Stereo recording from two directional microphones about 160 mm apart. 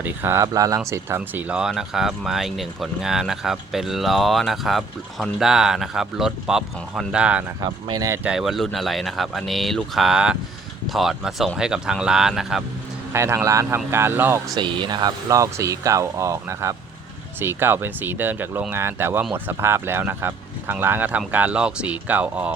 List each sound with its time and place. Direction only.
0.0 s speech: 15° right (ahead or behind)
7.6 s speech: 25° right (ahead or behind)
8.2 s speech: 5° right (ahead or behind)
13.1 s speech: 15° right (ahead or behind)
14.6 s speech: 30° right (ahead or behind); by 22.5 s 10° right (ahead or behind)